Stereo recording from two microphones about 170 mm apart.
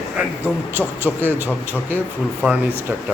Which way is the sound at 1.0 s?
10° right (ahead or behind).